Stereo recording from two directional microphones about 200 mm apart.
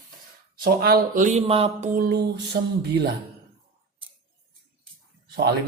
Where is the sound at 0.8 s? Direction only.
45° right (ahead or behind); by 1.8 s 30° right (ahead or behind).